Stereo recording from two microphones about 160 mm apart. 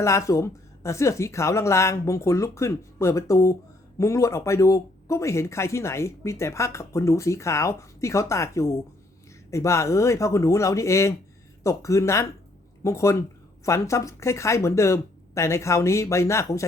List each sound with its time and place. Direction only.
0.0 s speech: 20° left (ahead or behind)